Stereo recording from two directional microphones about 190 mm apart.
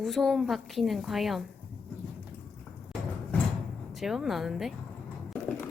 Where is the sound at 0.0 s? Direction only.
Centre (ahead or behind).